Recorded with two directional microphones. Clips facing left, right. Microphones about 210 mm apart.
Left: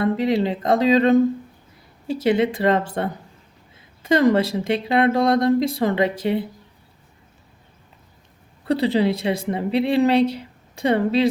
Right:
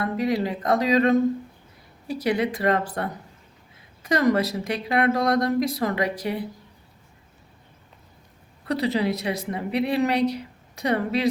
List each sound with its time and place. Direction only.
0.0 s a woman's voice: 25° left (ahead or behind)
8.6 s a woman's voice: 30° left (ahead or behind)